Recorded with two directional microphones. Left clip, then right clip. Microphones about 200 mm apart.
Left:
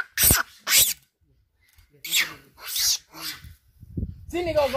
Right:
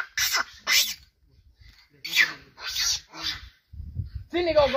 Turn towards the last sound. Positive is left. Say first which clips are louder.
# right 2 dB
turn(degrees=60)  # may be behind; listen again after turning